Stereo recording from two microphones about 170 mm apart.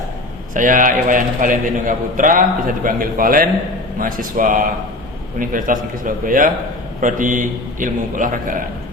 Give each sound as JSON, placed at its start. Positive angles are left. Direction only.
{"t": 0.5, "sound": "a man's voice", "side_deg": -50}